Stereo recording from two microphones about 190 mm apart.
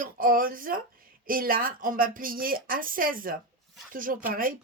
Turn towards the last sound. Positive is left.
turn(degrees=-45)  # may be behind; listen again after turning